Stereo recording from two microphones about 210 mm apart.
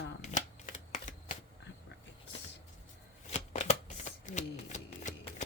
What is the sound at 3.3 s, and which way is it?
Shuffling cards, 30° left (ahead or behind).